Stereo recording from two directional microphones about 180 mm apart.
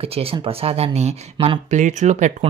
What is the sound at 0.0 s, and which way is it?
Speech, 30° right (ahead or behind).